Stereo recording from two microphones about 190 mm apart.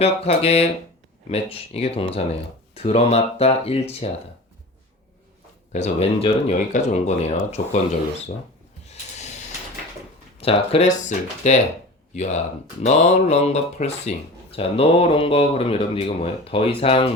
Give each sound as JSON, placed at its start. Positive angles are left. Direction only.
{"t": 0.0, "sound": "speech", "side_deg": 30}
{"t": 5.7, "sound": "speech", "side_deg": 35}
{"t": 8.9, "sound": "a sound", "side_deg": 35}
{"t": 10.4, "sound": "speech", "side_deg": 30}